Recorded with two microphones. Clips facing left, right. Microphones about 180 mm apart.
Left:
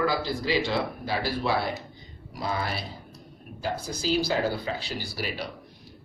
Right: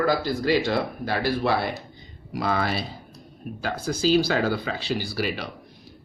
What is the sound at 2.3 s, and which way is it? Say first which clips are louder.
Speech: right 5 dB; 80° right.